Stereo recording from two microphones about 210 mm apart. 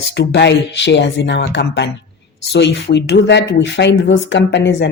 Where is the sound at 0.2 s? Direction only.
55° left (ahead or behind).